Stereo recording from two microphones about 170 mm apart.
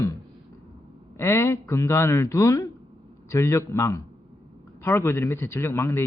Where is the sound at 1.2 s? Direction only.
15° left (ahead or behind).